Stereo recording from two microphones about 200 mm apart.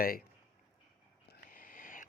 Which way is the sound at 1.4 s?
45° left (ahead or behind).